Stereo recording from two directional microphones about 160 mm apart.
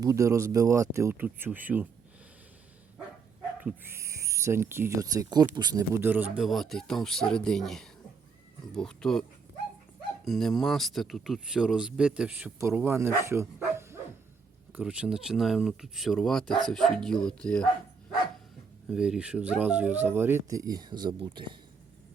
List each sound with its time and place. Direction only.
0.0 s speech: 20° right (ahead or behind)
3.6 s speech: 10° right (ahead or behind); by 9.2 s 5° left (ahead or behind)
10.2 s speech: centre (ahead or behind)
18.9 s speech: 5° right (ahead or behind); by 21.6 s 30° right (ahead or behind)